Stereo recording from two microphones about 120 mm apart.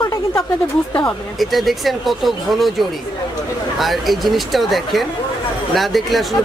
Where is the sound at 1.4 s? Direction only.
Centre (ahead or behind).